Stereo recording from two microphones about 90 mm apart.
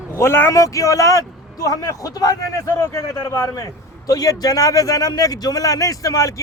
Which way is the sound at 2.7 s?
30° left (ahead or behind).